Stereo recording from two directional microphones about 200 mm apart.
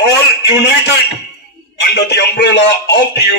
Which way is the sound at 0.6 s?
55° left (ahead or behind).